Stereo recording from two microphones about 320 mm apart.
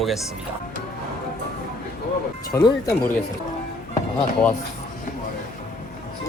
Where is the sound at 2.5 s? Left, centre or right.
Centre.